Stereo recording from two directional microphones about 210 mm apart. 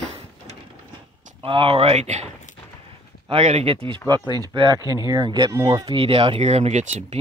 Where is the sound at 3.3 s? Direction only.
30° right (ahead or behind).